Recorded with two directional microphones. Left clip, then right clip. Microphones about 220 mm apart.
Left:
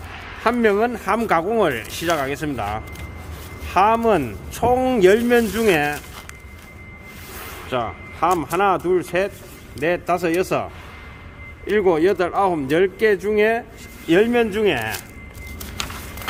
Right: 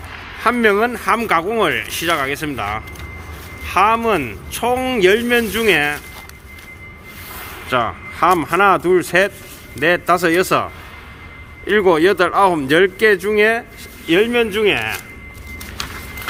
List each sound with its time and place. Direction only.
0.4 s speech: 10° left (ahead or behind)
7.7 s speech: 5° right (ahead or behind)
14.1 s speech: 25° left (ahead or behind)